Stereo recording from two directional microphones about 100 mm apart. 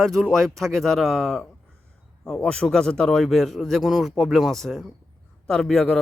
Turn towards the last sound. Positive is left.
turn(degrees=10)  # may be behind; listen again after turning